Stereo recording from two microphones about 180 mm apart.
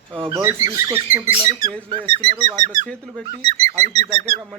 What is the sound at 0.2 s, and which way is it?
Speech, 20° right (ahead or behind).